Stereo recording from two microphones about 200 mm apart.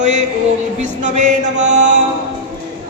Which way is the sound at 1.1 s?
35° right (ahead or behind).